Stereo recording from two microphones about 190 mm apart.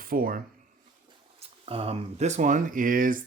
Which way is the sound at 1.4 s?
30° right (ahead or behind).